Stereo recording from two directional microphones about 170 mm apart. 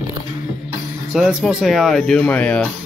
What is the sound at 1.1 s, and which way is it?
Speech, centre (ahead or behind).